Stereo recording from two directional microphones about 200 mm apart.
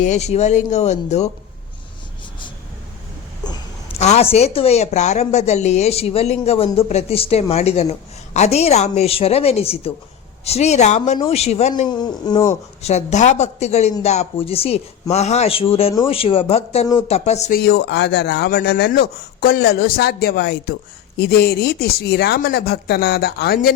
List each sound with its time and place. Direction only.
0.0 s a woman's voice: 35° left (ahead or behind)
3.9 s a woman's voice: 35° left (ahead or behind)
11.9 s speech: 20° left (ahead or behind)
12.8 s a woman's voice: 35° left (ahead or behind)
17.6 s speech: 55° left (ahead or behind)